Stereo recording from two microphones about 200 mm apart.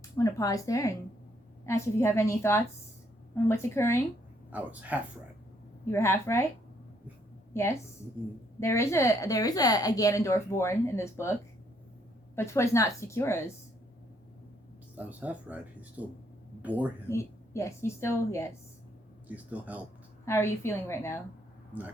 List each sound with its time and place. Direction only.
0.2 s speech: 15° left (ahead or behind)
4.5 s speech: 10° right (ahead or behind)
5.8 s speech: 15° left (ahead or behind)
7.5 s a woman's voice: 15° left (ahead or behind)
12.4 s speech: 15° left (ahead or behind)
14.9 s speech: 5° right (ahead or behind)
17.1 s speech: 15° left (ahead or behind)
19.3 s speech: 10° right (ahead or behind)
20.2 s speech: 15° left (ahead or behind)